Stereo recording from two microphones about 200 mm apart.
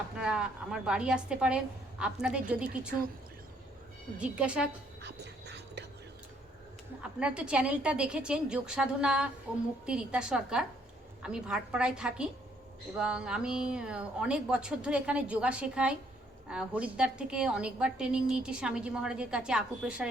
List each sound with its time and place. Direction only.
0.2 s a woman's voice: 5° right (ahead or behind)
4.2 s a woman's voice: 5° right (ahead or behind)
5.0 s whispering: 60° right (ahead or behind)
7.2 s a woman's voice: 5° right (ahead or behind)